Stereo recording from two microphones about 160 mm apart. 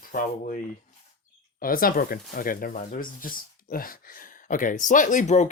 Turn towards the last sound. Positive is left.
turn(degrees=50)  # may be behind; listen again after turning